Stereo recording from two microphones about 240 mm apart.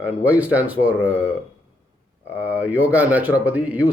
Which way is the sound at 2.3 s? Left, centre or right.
Centre.